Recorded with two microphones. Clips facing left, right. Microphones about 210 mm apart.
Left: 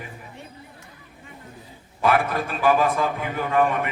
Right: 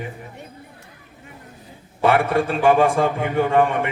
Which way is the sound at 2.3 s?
30° right (ahead or behind).